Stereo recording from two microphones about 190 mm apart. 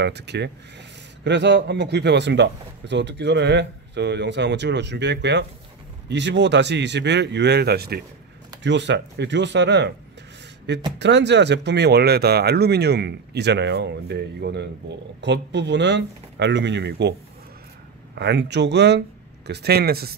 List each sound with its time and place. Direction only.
0.0 s speech: 65° right (ahead or behind)
8.6 s speech: 65° right (ahead or behind)
11.0 s speech: 65° right (ahead or behind)
18.1 s speech: 65° right (ahead or behind)